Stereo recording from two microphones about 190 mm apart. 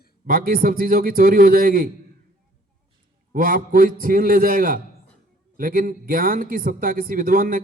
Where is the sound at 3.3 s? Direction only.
50° right (ahead or behind).